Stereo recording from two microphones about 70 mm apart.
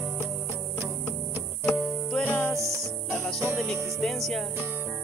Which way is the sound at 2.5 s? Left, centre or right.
Right.